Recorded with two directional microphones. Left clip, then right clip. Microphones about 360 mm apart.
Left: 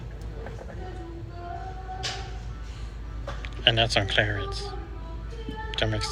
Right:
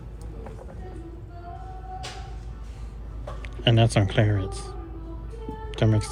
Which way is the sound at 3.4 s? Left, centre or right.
Centre.